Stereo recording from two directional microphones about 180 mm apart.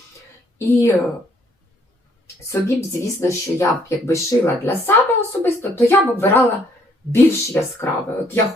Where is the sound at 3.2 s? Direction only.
15° left (ahead or behind).